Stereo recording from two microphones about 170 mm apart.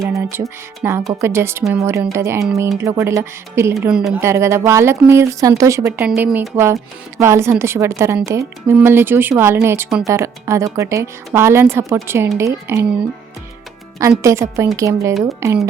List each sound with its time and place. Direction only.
0.1 s a woman's voice: 15° right (ahead or behind)
3.8 s a woman's voice: 5° right (ahead or behind)
4.2 s a woman's voice: 15° right (ahead or behind)
6.1 s a woman's voice: 5° right (ahead or behind)
14.2 s a woman's voice: 15° right (ahead or behind)